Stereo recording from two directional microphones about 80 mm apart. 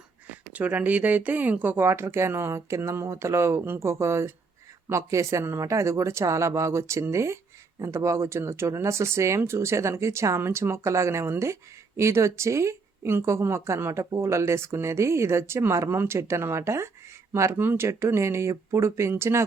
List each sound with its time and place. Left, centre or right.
0.5 s speech: centre